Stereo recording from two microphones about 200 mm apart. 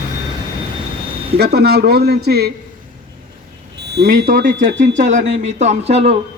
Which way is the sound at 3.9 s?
55° right (ahead or behind).